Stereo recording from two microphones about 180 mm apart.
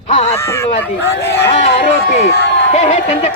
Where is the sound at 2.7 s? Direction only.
40° left (ahead or behind).